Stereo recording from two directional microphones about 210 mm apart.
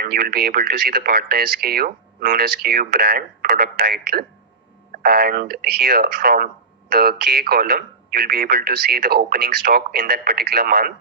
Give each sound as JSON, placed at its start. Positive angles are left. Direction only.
{"t": 0.0, "sound": "speech", "side_deg": -45}